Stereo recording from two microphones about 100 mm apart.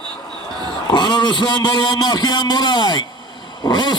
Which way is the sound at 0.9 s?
50° left (ahead or behind).